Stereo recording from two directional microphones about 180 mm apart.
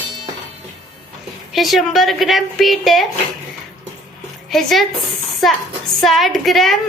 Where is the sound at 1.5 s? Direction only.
Centre (ahead or behind).